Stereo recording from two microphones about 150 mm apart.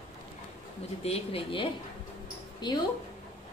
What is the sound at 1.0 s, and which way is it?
A woman's voice, 40° left (ahead or behind).